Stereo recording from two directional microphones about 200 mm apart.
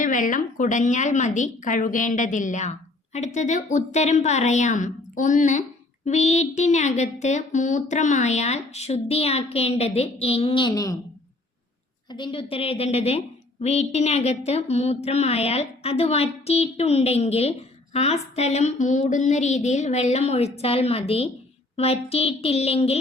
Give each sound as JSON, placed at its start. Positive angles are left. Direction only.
{"t": 0.0, "sound": "a woman's voice", "side_deg": 40}
{"t": 12.1, "sound": "a woman's voice", "side_deg": 25}